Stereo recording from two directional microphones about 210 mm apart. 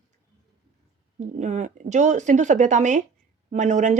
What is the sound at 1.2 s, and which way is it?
Speech, 35° right (ahead or behind).